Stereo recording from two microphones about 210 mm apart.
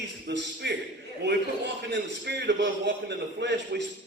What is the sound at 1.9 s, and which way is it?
A man's voice, 55° right (ahead or behind).